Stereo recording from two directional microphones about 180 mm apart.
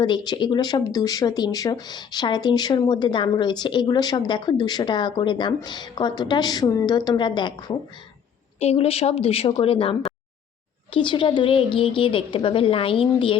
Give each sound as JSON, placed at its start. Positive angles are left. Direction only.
{"t": 0.0, "sound": "a woman's voice", "side_deg": 25}